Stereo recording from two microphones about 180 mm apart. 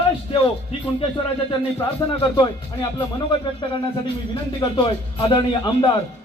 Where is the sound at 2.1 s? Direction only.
25° left (ahead or behind).